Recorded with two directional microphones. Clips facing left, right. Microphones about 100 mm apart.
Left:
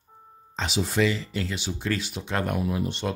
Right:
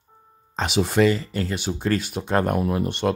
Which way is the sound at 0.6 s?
60° right (ahead or behind).